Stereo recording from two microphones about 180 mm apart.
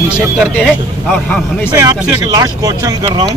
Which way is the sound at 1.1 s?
10° left (ahead or behind).